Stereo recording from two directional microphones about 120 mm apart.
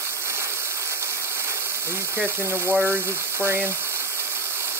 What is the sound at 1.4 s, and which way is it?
Speech, 20° right (ahead or behind).